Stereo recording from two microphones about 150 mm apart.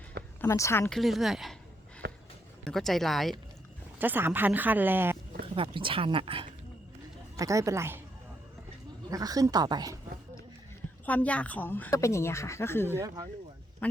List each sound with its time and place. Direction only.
0.4 s speech: 20° left (ahead or behind)
0.9 s a woman's voice: centre (ahead or behind)
2.0 s a sound: 90° right
2.6 s a woman's voice: centre (ahead or behind)
4.0 s speech: 10° right (ahead or behind)
5.5 s speech: 35° right (ahead or behind)
7.3 s speech: 20° right (ahead or behind)
9.0 s speech: 25° right (ahead or behind)
11.0 s speech: 10° left (ahead or behind)
13.8 s a sound: 10° left (ahead or behind)